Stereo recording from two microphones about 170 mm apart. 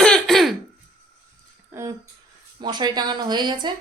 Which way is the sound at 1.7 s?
15° right (ahead or behind).